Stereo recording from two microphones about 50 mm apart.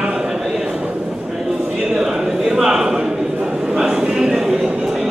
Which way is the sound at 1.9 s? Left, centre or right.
Centre.